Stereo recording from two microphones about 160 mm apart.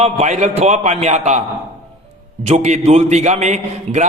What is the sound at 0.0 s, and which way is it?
A man's voice, 45° right (ahead or behind).